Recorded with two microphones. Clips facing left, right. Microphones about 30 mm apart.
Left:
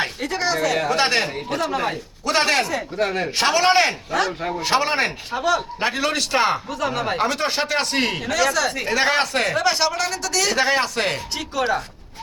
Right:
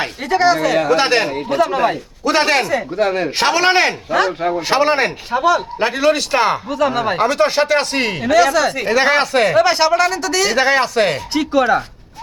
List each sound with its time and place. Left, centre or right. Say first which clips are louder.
0.2 s speech: right 12 dB; right
2.4 s speech: right 3 dB; centre
2.6 s speech: right 6 dB; right
3.0 s speech: right 5 dB; centre
3.2 s speech: even; right
5.3 s speech: right 8 dB; right
5.8 s speech: right 6 dB; centre
7.2 s speech: right 9 dB; centre
8.2 s speech: right 12 dB; centre